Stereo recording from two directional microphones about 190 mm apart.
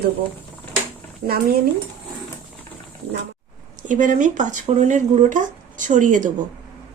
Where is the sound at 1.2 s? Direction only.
55° right (ahead or behind).